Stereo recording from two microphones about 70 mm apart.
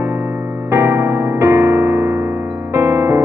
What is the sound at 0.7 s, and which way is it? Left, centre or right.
Music, right.